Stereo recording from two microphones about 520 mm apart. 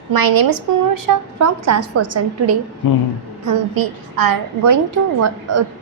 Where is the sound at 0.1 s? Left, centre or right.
Right.